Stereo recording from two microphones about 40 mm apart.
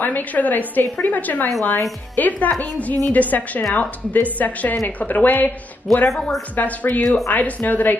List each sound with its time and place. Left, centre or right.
0.0 s a woman's voice: left
5.9 s a woman's voice: centre
6.5 s speech: left
7.0 s a woman's voice: centre
7.2 s a woman's voice: left